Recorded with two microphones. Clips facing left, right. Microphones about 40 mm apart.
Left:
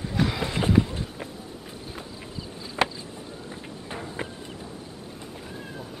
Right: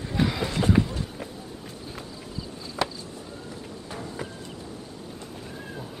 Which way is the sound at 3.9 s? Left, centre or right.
Left.